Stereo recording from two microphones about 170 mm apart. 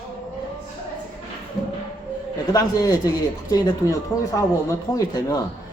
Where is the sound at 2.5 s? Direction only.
20° left (ahead or behind).